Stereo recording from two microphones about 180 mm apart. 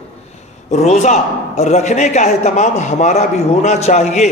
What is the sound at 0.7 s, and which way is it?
A man's voice, 40° left (ahead or behind).